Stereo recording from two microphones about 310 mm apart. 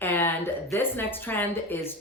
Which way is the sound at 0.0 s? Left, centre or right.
Centre.